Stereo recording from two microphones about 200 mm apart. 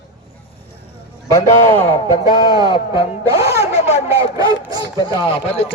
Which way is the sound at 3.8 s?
35° left (ahead or behind).